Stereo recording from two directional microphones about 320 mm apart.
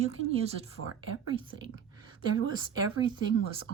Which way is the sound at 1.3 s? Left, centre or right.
Centre.